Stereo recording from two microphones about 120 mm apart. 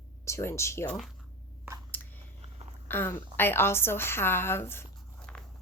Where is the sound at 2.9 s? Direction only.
20° left (ahead or behind).